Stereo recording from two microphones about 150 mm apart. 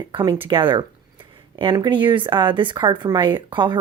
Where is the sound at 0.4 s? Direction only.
35° right (ahead or behind).